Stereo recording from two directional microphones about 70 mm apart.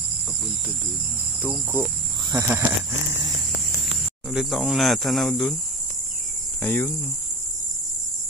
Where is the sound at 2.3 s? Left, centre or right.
Right.